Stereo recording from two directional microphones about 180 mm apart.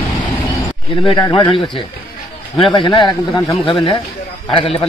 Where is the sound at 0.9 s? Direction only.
30° left (ahead or behind).